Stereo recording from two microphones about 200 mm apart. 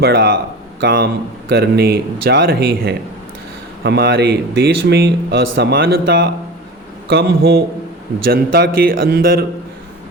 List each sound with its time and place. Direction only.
0.0 s speech: 50° right (ahead or behind)